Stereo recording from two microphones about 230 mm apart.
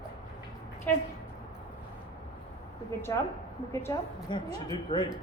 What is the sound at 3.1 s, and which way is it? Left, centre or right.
A woman's voice, centre.